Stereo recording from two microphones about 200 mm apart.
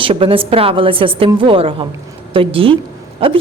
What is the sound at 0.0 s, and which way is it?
A woman's voice, 25° right (ahead or behind).